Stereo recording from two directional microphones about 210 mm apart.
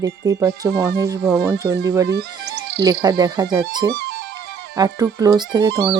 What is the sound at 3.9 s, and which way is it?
Speech, 50° right (ahead or behind).